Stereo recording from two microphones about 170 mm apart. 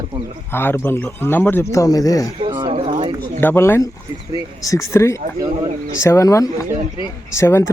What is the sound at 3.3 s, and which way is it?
Speech, 15° left (ahead or behind).